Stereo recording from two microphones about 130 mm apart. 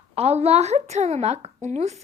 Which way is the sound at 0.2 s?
55° right (ahead or behind).